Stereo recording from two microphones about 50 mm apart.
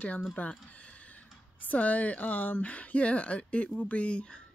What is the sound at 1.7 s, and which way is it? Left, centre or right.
Speech, left.